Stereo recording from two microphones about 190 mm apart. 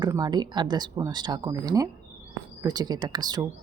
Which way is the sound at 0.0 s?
20° right (ahead or behind).